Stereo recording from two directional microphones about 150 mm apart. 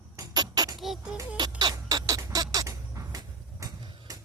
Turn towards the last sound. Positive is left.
turn(degrees=-25)  # may be behind; listen again after turning